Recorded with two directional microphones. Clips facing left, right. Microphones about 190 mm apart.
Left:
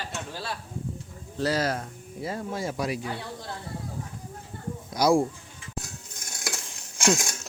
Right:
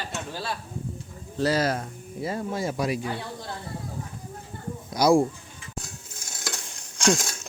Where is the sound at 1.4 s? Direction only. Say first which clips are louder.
Right 2 dB; 10° right (ahead or behind).